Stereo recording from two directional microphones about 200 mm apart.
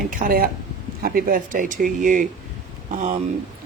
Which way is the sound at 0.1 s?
45° right (ahead or behind).